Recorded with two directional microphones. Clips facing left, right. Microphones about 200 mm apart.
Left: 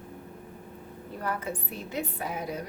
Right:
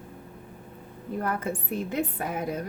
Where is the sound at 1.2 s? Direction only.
50° right (ahead or behind).